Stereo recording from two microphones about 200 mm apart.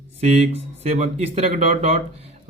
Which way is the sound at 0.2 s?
35° right (ahead or behind).